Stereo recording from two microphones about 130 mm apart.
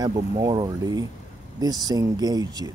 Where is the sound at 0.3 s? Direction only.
35° right (ahead or behind).